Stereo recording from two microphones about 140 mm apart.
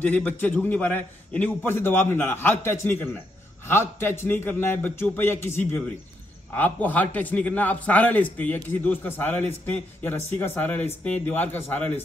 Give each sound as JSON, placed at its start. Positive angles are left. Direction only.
{"t": 0.0, "sound": "a man's voice", "side_deg": 10}